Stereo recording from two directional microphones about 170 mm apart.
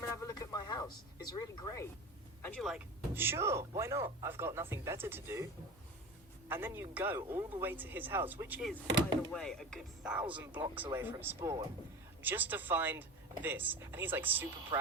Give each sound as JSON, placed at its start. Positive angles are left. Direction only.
{"t": 0.0, "sound": "a sound", "side_deg": 15}
{"t": 2.6, "sound": "speech", "side_deg": 0}
{"t": 3.2, "sound": "speech", "side_deg": -15}
{"t": 6.5, "sound": "speech", "side_deg": -10}
{"t": 9.3, "sound": "speech", "side_deg": 5}